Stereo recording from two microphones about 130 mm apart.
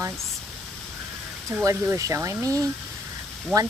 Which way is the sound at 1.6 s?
25° right (ahead or behind).